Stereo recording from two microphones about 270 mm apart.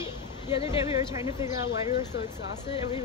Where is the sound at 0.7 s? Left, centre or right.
Centre.